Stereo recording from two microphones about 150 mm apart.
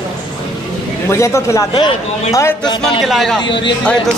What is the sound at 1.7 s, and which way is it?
Speech, 30° left (ahead or behind).